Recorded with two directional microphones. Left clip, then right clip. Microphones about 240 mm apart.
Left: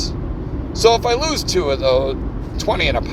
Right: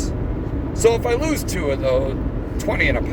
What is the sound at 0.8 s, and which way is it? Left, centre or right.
Speech, left.